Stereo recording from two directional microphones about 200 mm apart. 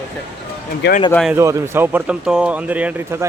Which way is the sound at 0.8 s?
55° left (ahead or behind).